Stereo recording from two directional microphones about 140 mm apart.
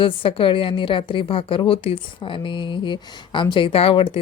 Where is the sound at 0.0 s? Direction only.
40° left (ahead or behind).